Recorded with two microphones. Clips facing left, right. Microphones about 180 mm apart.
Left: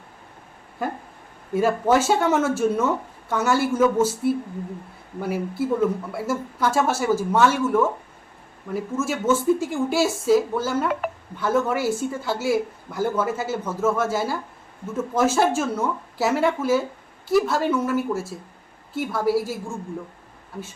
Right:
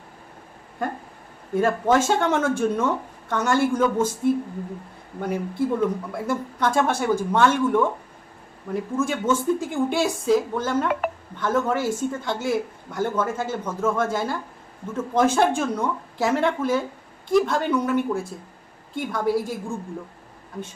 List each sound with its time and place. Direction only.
0.8 s a woman's voice: 5° left (ahead or behind)